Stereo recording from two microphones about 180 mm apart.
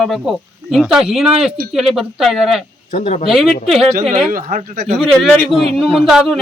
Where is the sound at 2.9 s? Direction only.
35° left (ahead or behind).